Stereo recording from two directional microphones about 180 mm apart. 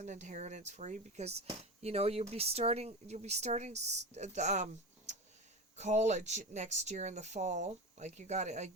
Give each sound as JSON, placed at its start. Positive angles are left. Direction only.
{"t": 0.0, "sound": "speech", "side_deg": -40}